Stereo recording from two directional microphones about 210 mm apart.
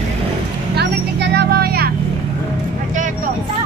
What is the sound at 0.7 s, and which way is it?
Vehicle, 50° right (ahead or behind).